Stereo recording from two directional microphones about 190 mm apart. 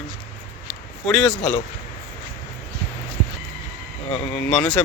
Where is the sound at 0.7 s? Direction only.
Centre (ahead or behind).